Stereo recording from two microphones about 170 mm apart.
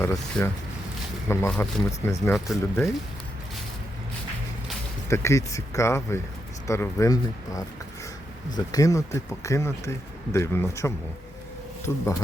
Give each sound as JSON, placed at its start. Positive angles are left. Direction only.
{"t": 0.0, "sound": "speech", "side_deg": 15}
{"t": 5.0, "sound": "speech", "side_deg": 15}